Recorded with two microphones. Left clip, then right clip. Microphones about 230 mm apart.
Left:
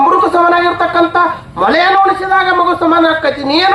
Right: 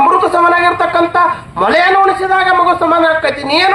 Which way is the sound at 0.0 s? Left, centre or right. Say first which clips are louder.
Even; right.